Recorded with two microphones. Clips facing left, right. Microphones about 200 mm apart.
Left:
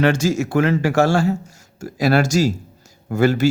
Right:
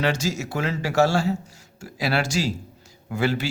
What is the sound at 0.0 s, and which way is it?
Speech, 50° left (ahead or behind).